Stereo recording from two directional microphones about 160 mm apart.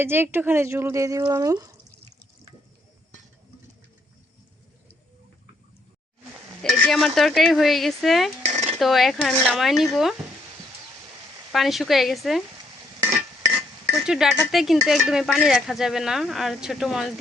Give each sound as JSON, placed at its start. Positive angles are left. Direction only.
{"t": 0.0, "sound": "speech", "side_deg": -15}
{"t": 6.6, "sound": "speech", "side_deg": 5}
{"t": 8.4, "sound": "a sound", "side_deg": -45}
{"t": 8.8, "sound": "speech", "side_deg": 0}
{"t": 11.5, "sound": "speech", "side_deg": 0}
{"t": 13.9, "sound": "speech", "side_deg": -5}